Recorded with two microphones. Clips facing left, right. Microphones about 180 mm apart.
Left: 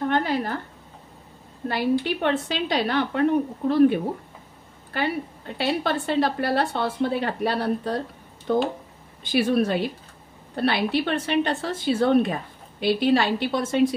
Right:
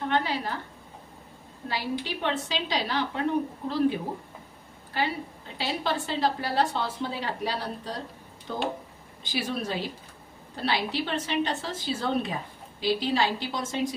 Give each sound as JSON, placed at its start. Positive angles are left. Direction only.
{"t": 0.0, "sound": "a sound", "side_deg": 50}
{"t": 1.7, "sound": "speech", "side_deg": 55}
{"t": 5.6, "sound": "speech", "side_deg": 60}